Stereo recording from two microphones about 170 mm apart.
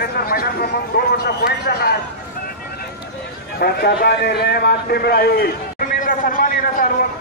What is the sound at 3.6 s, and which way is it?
A man's voice, 65° left (ahead or behind).